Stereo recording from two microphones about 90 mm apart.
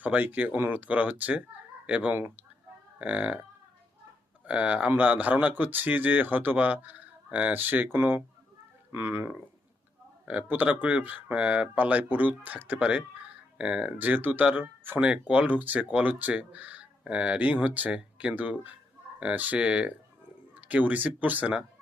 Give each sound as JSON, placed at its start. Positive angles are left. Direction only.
{"t": 0.0, "sound": "speech", "side_deg": -20}
{"t": 4.4, "sound": "speech", "side_deg": -15}